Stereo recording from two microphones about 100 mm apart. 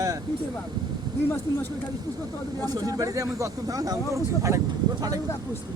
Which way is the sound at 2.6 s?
35° right (ahead or behind).